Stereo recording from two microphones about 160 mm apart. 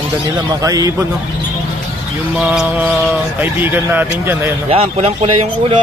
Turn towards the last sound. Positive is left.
turn(degrees=-35)  # may be behind; listen again after turning